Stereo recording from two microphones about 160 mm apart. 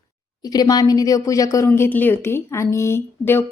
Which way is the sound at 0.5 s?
25° left (ahead or behind).